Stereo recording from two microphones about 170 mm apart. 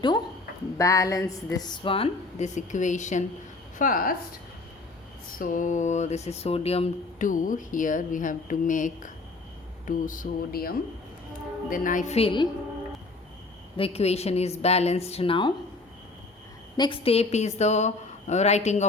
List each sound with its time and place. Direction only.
0.8 s a woman's voice: 20° left (ahead or behind); by 4.1 s 55° left (ahead or behind)
5.4 s speech: 50° left (ahead or behind)
7.2 s speech: 50° left (ahead or behind)
11.7 s speech: 50° left (ahead or behind); by 12.5 s 30° left (ahead or behind)
13.7 s speech: 35° left (ahead or behind)
16.7 s speech: 30° left (ahead or behind)